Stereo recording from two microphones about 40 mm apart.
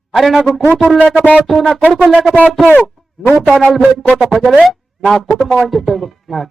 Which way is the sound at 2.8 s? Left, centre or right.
Centre.